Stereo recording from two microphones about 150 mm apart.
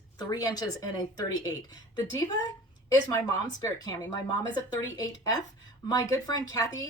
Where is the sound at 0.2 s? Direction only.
25° left (ahead or behind).